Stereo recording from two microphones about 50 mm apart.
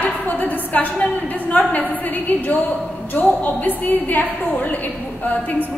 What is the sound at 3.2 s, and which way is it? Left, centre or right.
A woman's voice, left.